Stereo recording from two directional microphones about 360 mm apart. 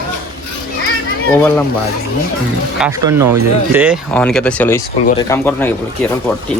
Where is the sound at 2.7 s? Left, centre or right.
Centre.